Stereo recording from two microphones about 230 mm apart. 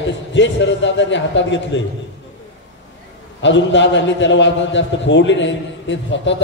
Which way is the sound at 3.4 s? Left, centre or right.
Left.